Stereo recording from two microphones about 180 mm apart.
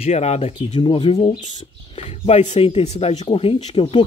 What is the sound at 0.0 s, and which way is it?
Speech, 35° left (ahead or behind).